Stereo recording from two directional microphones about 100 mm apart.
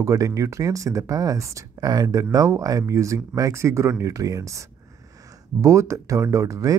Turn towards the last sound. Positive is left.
turn(degrees=-35)  # may be behind; listen again after turning